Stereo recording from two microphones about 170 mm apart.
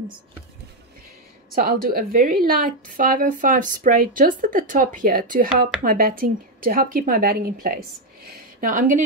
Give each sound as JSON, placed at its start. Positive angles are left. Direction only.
{"t": 1.5, "sound": "a woman's voice", "side_deg": -60}